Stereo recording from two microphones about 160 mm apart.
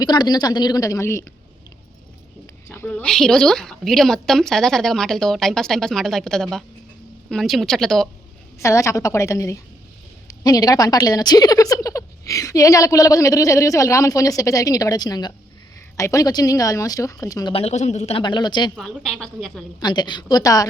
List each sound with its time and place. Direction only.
0.0 s speech: 25° left (ahead or behind)
2.6 s a woman's voice: 15° left (ahead or behind)
8.5 s speech: 20° left (ahead or behind)
17.5 s speech: 40° left (ahead or behind)
18.2 s speech: 30° left (ahead or behind)
18.8 s a woman's voice: centre (ahead or behind)
19.8 s speech: 30° left (ahead or behind)